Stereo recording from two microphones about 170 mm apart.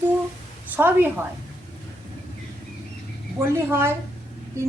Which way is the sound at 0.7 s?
10° right (ahead or behind).